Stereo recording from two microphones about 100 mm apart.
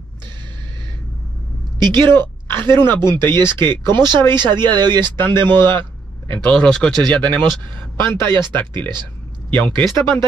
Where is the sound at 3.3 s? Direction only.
50° right (ahead or behind).